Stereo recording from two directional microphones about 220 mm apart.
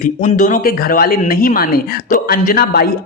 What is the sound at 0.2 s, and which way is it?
Speech, 35° left (ahead or behind).